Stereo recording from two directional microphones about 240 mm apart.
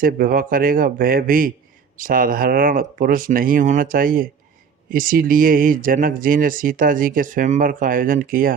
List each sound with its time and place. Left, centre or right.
0.0 s speech: right